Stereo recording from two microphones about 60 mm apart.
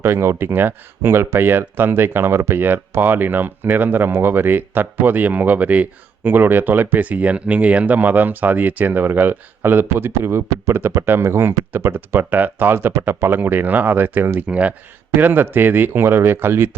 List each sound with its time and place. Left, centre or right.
0.0 s speech: right
14.4 s speech: right
15.1 s speech: right